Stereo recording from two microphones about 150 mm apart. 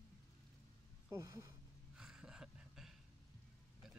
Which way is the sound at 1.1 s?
20° right (ahead or behind).